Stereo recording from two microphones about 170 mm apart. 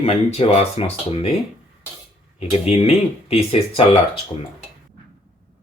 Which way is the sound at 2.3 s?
35° left (ahead or behind).